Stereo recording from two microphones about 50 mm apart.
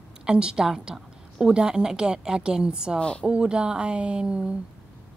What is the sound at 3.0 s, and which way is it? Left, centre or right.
Speech, centre.